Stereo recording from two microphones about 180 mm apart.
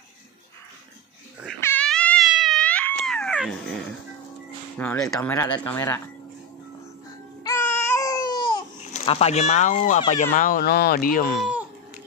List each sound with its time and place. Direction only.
1.6 s cat: 10° left (ahead or behind)
4.7 s speech: 5° left (ahead or behind)
5.3 s speech: 15° left (ahead or behind)
7.4 s baby cry: 15° left (ahead or behind)
8.9 s speech: 35° left (ahead or behind); by 11.3 s 50° left (ahead or behind)